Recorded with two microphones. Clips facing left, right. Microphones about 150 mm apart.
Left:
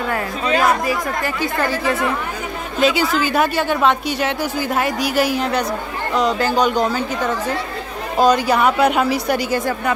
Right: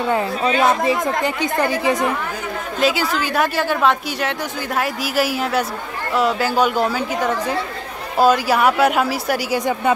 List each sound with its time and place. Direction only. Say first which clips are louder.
0.1 s speech: right 1 dB; 25° right (ahead or behind)
2.8 s a woman's voice: left 3 dB; centre (ahead or behind)